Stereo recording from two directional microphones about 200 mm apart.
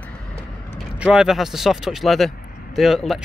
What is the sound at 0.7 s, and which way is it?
Speech, centre (ahead or behind).